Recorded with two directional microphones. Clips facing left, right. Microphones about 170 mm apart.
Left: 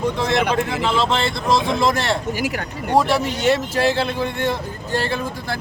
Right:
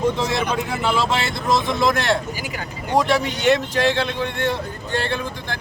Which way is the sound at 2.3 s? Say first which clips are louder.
Left 6 dB; 70° left (ahead or behind).